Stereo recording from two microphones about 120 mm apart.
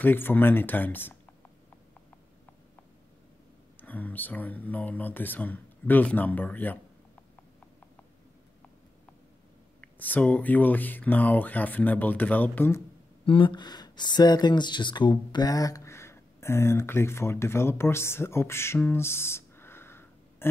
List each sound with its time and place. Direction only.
0.0 s speech: 15° left (ahead or behind)
3.8 s speech: 15° left (ahead or behind)
9.8 s speech: 15° left (ahead or behind)
13.2 s speech: 45° left (ahead or behind); by 20.4 s 20° left (ahead or behind)